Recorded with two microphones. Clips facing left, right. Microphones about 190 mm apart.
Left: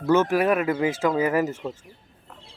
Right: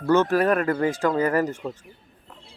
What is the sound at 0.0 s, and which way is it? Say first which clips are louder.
A man's voice: even; 10° left (ahead or behind).